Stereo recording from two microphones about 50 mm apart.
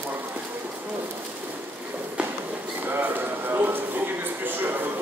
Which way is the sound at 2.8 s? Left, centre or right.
Right.